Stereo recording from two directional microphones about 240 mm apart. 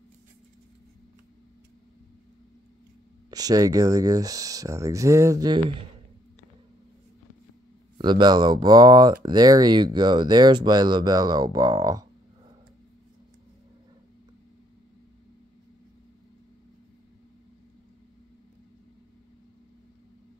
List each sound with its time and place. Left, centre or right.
3.3 s speech: centre
8.0 s speech: centre